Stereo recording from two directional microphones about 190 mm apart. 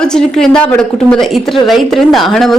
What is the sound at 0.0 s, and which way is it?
A woman's voice, 5° left (ahead or behind).